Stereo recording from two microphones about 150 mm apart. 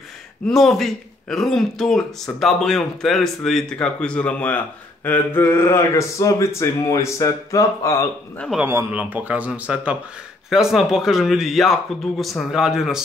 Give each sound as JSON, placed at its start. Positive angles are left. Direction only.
{"t": 0.5, "sound": "speech", "side_deg": 0}
{"t": 5.0, "sound": "a sound", "side_deg": 15}
{"t": 8.5, "sound": "speech", "side_deg": -15}